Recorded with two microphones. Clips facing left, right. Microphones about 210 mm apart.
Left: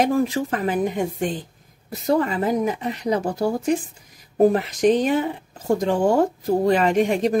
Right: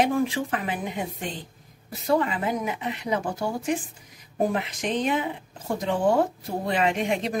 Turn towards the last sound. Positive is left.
turn(degrees=40)  # may be behind; listen again after turning